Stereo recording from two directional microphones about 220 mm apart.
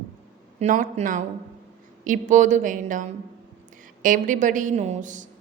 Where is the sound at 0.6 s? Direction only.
30° right (ahead or behind).